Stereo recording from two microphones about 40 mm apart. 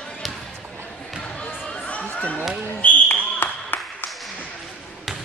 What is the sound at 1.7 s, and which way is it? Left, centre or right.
Chatter, left.